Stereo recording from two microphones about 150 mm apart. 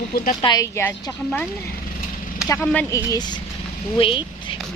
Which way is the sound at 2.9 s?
25° left (ahead or behind).